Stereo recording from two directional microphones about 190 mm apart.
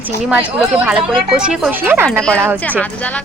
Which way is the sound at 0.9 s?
5° right (ahead or behind).